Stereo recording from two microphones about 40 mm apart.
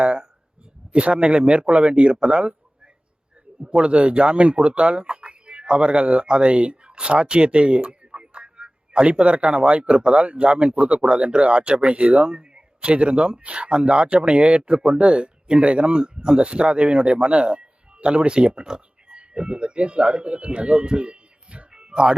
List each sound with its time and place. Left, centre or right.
0.0 s a man's voice: right
2.1 s a sound: right
3.7 s a man's voice: right